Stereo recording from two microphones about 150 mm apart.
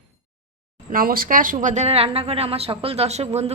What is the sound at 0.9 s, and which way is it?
Speech, 70° right (ahead or behind).